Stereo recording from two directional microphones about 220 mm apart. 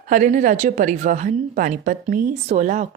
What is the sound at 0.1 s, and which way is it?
A woman's voice, 35° right (ahead or behind).